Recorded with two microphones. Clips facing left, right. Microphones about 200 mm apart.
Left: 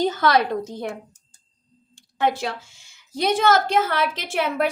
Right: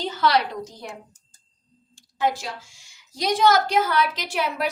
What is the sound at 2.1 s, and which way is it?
A woman's voice, 60° left (ahead or behind).